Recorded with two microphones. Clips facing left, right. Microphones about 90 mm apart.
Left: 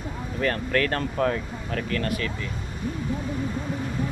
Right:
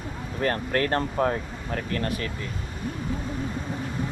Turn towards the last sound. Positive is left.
turn(degrees=-30)  # may be behind; listen again after turning